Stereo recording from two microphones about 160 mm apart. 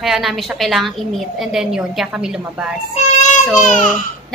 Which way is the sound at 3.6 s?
50° left (ahead or behind).